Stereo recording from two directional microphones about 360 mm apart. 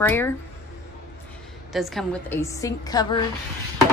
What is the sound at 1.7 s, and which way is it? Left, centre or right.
A woman's voice, centre.